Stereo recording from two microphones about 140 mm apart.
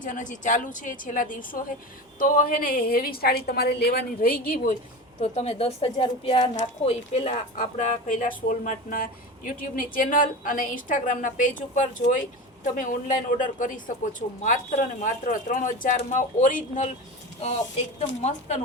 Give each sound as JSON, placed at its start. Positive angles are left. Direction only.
{"t": 0.0, "sound": "speech", "side_deg": 65}
{"t": 2.1, "sound": "a woman's voice", "side_deg": 85}
{"t": 5.2, "sound": "a woman's voice", "side_deg": 50}
{"t": 6.4, "sound": "a woman's voice", "side_deg": 50}
{"t": 8.4, "sound": "speech", "side_deg": 85}
{"t": 18.2, "sound": "a woman's voice", "side_deg": 55}